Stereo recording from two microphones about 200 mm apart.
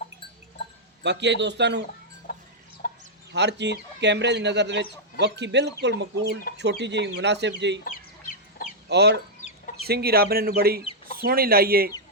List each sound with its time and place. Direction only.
1.0 s speech: 60° right (ahead or behind)
2.3 s chicken: 45° left (ahead or behind)
3.3 s speech: 60° right (ahead or behind)
8.9 s speech: 55° right (ahead or behind)